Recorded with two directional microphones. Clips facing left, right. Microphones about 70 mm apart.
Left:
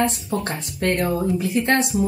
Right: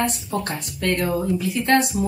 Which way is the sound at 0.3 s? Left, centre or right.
Left.